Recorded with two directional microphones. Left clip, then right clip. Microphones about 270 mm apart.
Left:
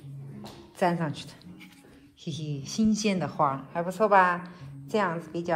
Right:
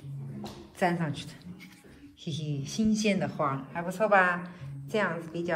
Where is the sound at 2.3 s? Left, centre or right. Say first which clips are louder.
Left 1 dB; centre.